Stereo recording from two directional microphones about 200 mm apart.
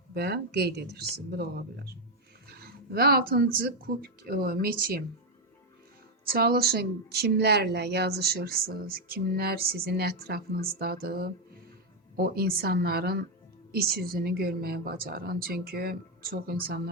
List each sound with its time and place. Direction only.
0.1 s a woman's voice: 55° right (ahead or behind)
6.2 s a woman's voice: 50° right (ahead or behind)